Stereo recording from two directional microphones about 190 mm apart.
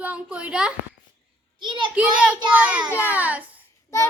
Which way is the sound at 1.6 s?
25° right (ahead or behind).